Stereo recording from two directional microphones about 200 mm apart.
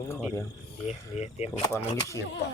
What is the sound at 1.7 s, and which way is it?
Speech, 15° left (ahead or behind).